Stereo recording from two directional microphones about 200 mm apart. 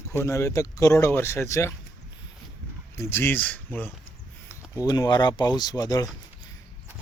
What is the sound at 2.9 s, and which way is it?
Speech, 10° left (ahead or behind).